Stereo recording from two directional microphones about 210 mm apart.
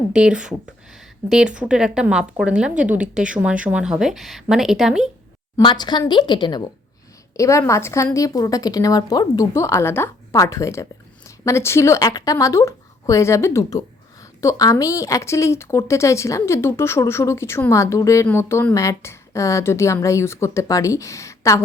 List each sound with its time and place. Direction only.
0.1 s a woman's voice: 5° right (ahead or behind)
5.5 s a woman's voice: 20° left (ahead or behind)